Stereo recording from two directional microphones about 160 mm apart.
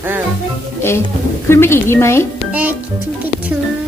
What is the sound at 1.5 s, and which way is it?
Speech, 15° left (ahead or behind).